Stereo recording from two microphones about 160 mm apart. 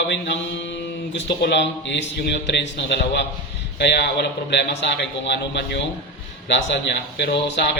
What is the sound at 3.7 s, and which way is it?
A man's voice, 90° left.